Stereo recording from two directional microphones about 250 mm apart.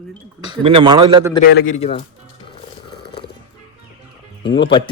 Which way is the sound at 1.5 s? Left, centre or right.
Left.